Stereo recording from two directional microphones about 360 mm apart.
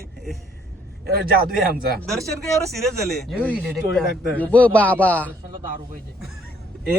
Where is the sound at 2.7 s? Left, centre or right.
Centre.